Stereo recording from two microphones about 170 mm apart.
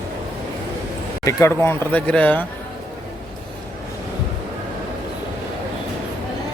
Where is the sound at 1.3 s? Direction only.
20° left (ahead or behind).